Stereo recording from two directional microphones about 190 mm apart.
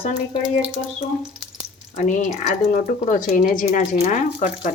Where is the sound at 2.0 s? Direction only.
40° left (ahead or behind).